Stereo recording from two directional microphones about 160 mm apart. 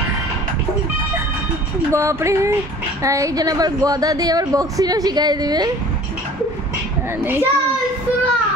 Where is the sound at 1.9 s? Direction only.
15° right (ahead or behind).